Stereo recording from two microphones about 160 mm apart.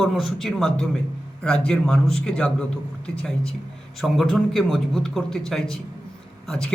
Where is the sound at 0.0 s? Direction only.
Centre (ahead or behind).